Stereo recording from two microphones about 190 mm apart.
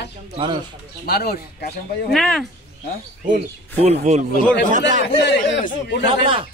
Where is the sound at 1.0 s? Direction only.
55° left (ahead or behind).